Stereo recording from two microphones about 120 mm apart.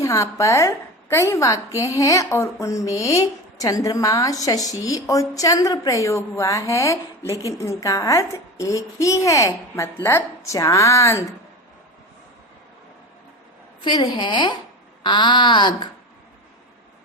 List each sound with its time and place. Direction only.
0.0 s a woman's voice: 25° left (ahead or behind)
13.8 s speech: 40° left (ahead or behind)